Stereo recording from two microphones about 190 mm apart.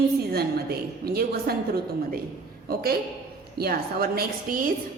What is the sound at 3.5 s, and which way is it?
A woman's voice, 55° right (ahead or behind).